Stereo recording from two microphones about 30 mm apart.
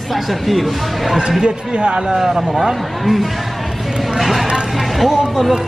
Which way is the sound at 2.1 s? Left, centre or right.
Centre.